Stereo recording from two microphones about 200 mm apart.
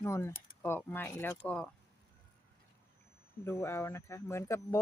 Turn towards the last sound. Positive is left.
turn(degrees=15)  # may be behind; listen again after turning